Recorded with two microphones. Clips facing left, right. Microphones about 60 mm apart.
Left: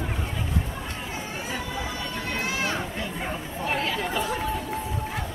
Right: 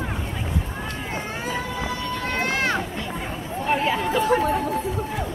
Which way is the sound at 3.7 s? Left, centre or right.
Right.